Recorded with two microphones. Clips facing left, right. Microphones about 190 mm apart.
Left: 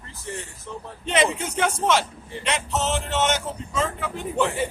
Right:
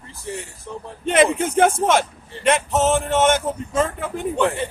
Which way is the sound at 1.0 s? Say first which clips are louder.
Right 6 dB; 50° right (ahead or behind).